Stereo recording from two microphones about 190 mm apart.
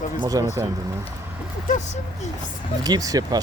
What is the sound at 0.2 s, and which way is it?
Speech, 20° right (ahead or behind).